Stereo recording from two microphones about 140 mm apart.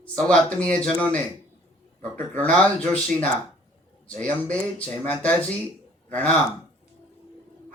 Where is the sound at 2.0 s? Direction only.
10° left (ahead or behind).